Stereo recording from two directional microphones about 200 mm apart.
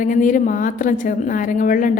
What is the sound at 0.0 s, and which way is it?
A woman's voice, 40° left (ahead or behind).